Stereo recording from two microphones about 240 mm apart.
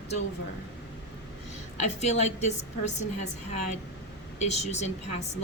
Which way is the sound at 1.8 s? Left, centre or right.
Left.